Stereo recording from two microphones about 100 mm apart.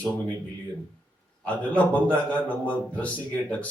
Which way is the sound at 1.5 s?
15° left (ahead or behind).